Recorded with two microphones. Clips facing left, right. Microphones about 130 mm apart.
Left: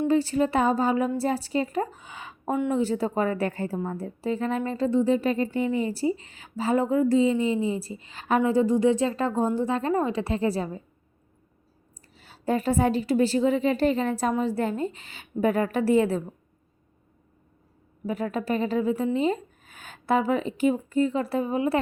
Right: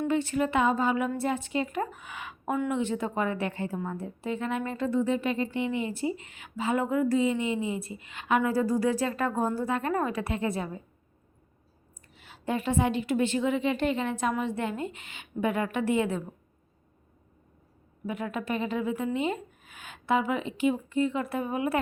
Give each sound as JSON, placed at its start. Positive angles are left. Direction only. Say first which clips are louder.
{"t": 0.1, "sound": "speech", "louder": "left 3 dB", "side_deg": 30}
{"t": 12.1, "sound": "speech", "louder": "left 5 dB", "side_deg": 35}
{"t": 18.0, "sound": "speech", "louder": "left 4 dB", "side_deg": 35}